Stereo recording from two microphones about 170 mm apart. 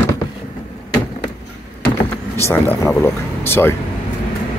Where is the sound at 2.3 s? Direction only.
15° left (ahead or behind).